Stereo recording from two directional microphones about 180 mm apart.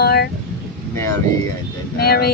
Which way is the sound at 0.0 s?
60° left (ahead or behind).